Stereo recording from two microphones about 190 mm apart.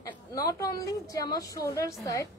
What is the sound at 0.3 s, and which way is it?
A woman's voice, 15° left (ahead or behind).